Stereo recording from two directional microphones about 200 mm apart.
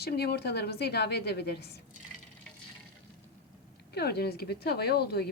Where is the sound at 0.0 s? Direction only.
55° left (ahead or behind).